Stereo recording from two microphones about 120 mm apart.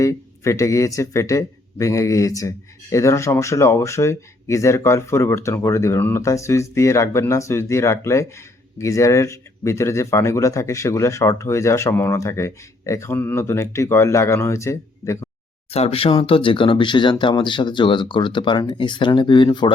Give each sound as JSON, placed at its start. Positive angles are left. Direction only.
{"t": 0.0, "sound": "speech", "side_deg": 25}
{"t": 15.7, "sound": "speech", "side_deg": 55}